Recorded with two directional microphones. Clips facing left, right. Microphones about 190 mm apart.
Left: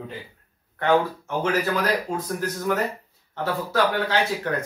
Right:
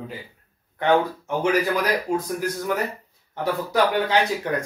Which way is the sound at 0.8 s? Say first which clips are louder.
Right 1 dB; 15° right (ahead or behind).